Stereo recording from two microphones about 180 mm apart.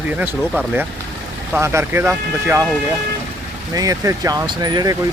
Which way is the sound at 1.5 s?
15° right (ahead or behind).